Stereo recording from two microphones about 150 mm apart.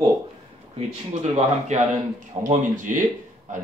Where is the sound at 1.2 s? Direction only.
50° right (ahead or behind).